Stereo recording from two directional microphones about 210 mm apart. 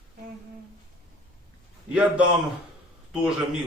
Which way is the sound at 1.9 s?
5° right (ahead or behind).